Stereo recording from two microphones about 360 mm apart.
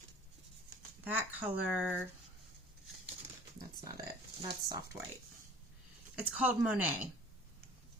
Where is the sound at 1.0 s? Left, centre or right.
Centre.